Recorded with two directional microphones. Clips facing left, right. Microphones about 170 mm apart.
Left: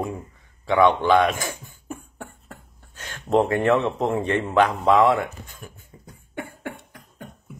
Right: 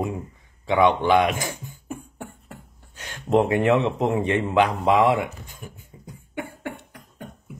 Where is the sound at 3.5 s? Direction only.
15° right (ahead or behind).